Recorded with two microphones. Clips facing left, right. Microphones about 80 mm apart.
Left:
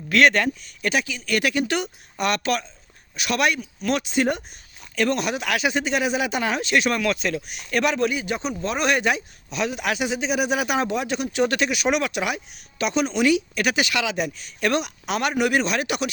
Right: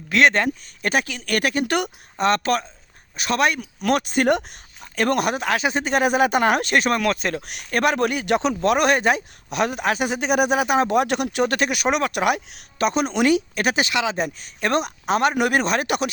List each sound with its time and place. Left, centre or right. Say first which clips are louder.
0.1 s speech: even; right
0.6 s speech: right 2 dB; right
2.1 s speech: right 3 dB; right
3.6 s speech: right 3 dB; right
4.3 s speech: right 6 dB; right
4.9 s speech: right 2 dB; right
8.9 s speech: right 3 dB; right
9.5 s speech: right 3 dB; right
10.9 s speech: right 4 dB; right
12.1 s speech: right 5 dB; right